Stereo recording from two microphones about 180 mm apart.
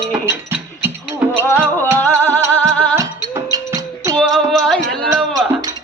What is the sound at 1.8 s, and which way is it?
Music, 10° left (ahead or behind).